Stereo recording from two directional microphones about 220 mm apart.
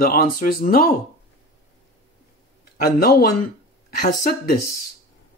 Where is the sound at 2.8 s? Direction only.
45° left (ahead or behind).